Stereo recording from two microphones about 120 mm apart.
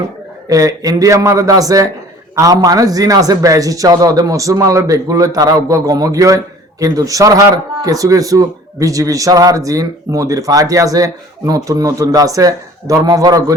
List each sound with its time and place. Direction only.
0.4 s a man's voice: 30° right (ahead or behind)